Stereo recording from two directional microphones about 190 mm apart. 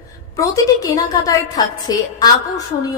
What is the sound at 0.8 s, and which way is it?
A woman's voice, 15° left (ahead or behind).